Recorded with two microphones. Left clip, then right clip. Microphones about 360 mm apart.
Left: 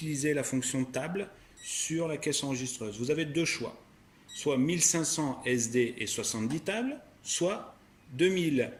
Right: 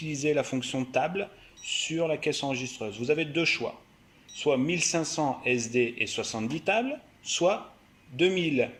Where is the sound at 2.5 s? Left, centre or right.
Centre.